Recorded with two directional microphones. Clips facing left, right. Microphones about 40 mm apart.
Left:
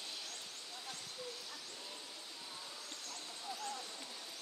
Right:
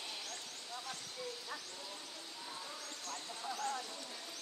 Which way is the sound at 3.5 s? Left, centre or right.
Right.